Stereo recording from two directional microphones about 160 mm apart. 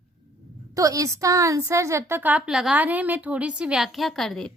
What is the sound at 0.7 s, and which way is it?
A woman's voice, 20° right (ahead or behind).